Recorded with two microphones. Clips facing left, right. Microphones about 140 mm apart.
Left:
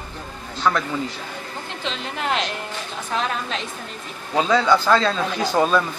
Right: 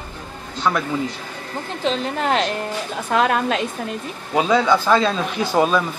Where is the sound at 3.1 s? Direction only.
55° right (ahead or behind).